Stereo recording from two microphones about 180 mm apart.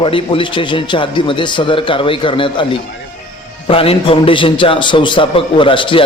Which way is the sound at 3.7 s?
30° left (ahead or behind).